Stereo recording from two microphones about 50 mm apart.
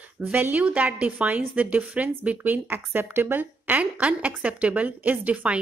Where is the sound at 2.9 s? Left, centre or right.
Right.